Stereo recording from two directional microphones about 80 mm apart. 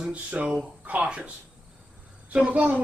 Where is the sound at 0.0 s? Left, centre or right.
Centre.